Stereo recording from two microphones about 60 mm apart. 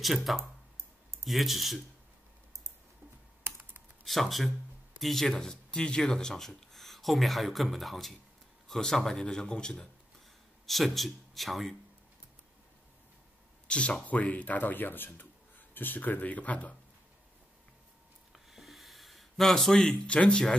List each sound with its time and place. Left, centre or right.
0.0 s speech: centre
4.0 s a man's voice: centre
10.7 s speech: centre
13.7 s speech: centre
18.5 s a sound: centre